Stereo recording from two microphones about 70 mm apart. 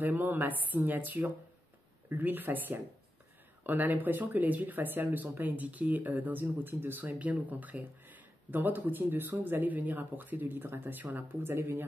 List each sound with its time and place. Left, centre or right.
0.0 s speech: right